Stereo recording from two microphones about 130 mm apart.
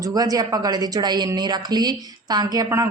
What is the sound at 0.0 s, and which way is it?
A woman's voice, 30° right (ahead or behind).